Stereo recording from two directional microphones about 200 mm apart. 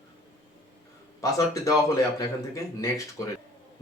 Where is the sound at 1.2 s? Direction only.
15° left (ahead or behind).